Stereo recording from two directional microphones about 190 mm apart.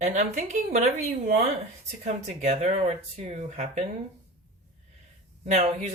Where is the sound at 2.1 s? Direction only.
35° right (ahead or behind).